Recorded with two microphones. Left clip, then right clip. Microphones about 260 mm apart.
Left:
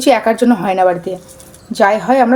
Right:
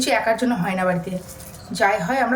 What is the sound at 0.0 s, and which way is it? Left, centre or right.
A woman's voice, left.